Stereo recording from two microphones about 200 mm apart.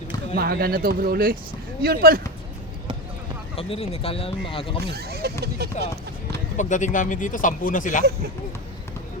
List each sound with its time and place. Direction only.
0.3 s speech: 50° right (ahead or behind)
3.5 s speech: 30° left (ahead or behind)
4.8 s speech: 55° right (ahead or behind)
6.6 s speech: 40° left (ahead or behind)